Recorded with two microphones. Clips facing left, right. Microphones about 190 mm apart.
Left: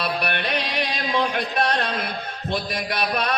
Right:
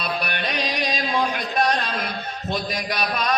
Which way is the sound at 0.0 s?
60° left (ahead or behind).